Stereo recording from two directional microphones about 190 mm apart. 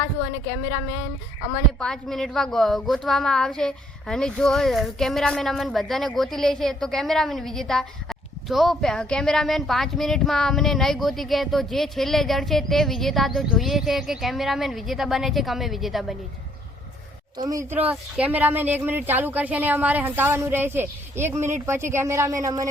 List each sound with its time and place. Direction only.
1.8 s speech: 5° left (ahead or behind)
17.3 s speech: 20° right (ahead or behind)